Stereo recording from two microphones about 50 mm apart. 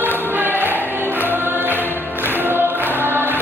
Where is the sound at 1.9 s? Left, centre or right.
Right.